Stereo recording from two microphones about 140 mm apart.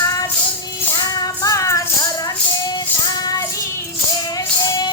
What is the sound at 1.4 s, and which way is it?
Music, 20° left (ahead or behind).